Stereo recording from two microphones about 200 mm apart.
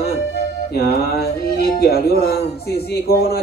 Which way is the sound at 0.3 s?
55° left (ahead or behind).